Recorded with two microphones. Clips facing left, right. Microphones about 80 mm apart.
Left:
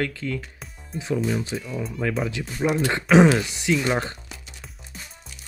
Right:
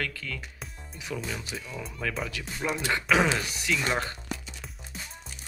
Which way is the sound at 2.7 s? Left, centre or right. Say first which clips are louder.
Left 8 dB; left.